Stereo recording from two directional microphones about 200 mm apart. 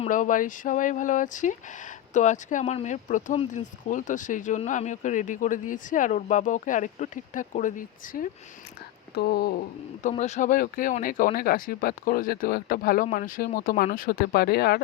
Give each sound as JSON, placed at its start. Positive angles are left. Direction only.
{"t": 0.0, "sound": "speech", "side_deg": 40}